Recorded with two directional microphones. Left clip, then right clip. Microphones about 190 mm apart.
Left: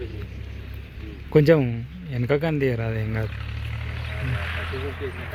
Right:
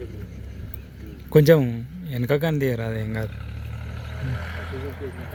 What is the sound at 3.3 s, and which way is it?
Vehicle, 50° right (ahead or behind).